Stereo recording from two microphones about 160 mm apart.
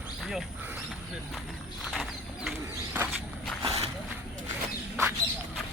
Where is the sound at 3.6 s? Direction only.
40° right (ahead or behind).